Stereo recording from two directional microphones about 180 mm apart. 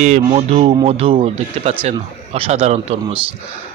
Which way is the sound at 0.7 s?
30° right (ahead or behind).